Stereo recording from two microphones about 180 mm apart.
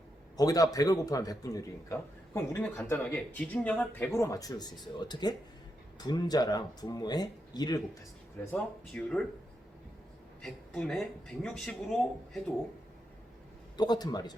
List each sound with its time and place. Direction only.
0.3 s a man's voice: 20° left (ahead or behind)
8.4 s speech: 5° left (ahead or behind)
10.4 s a woman's voice: centre (ahead or behind)
13.7 s a man's voice: 25° left (ahead or behind)